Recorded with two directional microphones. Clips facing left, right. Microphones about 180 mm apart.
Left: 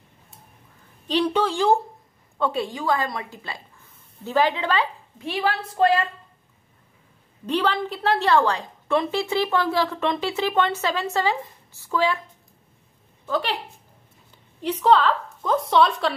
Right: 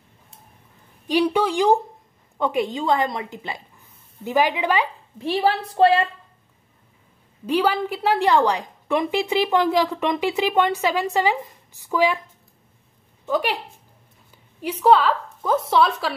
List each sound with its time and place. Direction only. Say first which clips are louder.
1.0 s a woman's voice: right 2 dB; 10° right (ahead or behind)
5.2 s a woman's voice: right 4 dB; 30° right (ahead or behind)
7.4 s a woman's voice: right 3 dB; 10° right (ahead or behind)
13.2 s a woman's voice: right 3 dB; 15° right (ahead or behind)
14.6 s a woman's voice: right 2 dB; 10° right (ahead or behind)